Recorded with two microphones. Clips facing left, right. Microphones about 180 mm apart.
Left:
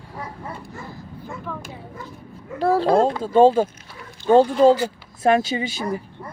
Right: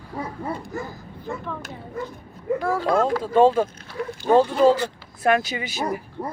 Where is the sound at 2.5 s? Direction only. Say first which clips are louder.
Left 4 dB; 30° left (ahead or behind).